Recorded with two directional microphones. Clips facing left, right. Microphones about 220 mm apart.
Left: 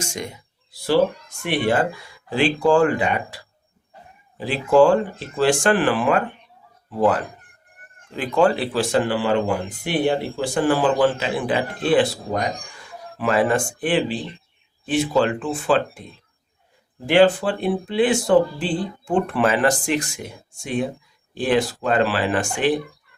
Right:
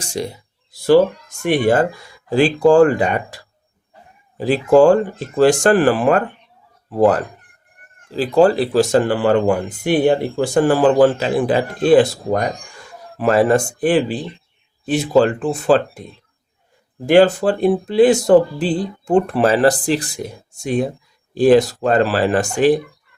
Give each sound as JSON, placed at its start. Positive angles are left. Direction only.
{"t": 0.0, "sound": "speech", "side_deg": -35}
{"t": 1.5, "sound": "speech", "side_deg": -45}
{"t": 4.4, "sound": "speech", "side_deg": -40}
{"t": 17.1, "sound": "speech", "side_deg": -45}